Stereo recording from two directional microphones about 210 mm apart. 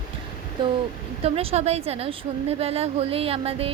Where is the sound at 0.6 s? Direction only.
20° right (ahead or behind).